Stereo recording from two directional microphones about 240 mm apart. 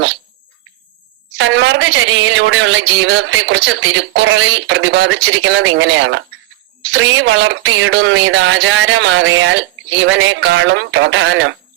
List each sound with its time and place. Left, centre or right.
1.4 s a woman's voice: right